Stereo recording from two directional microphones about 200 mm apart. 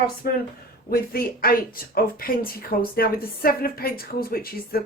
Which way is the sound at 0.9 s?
50° left (ahead or behind).